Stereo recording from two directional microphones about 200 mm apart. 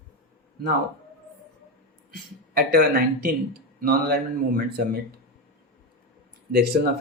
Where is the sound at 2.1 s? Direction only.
50° right (ahead or behind).